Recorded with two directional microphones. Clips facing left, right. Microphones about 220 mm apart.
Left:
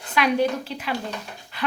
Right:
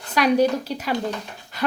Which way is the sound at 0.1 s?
40° right (ahead or behind).